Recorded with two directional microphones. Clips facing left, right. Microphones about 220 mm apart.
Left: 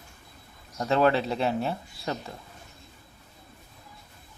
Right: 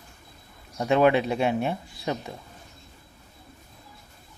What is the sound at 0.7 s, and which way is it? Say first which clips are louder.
Speech: right 3 dB; 15° right (ahead or behind).